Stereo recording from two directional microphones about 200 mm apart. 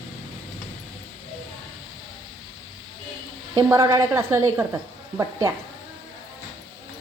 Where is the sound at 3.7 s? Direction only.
15° right (ahead or behind).